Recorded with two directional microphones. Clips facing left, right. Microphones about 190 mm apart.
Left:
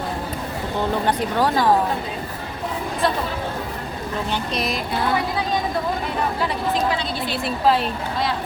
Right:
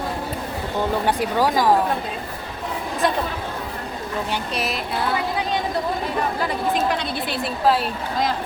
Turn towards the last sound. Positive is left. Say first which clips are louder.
# left 1 dB
turn(degrees=0)  # may be behind; listen again after turning